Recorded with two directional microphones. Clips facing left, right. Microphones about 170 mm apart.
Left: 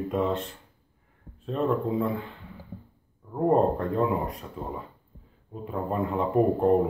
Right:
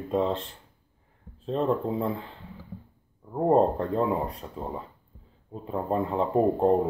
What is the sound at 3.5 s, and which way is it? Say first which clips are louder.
Speech: right 1 dB; 30° right (ahead or behind).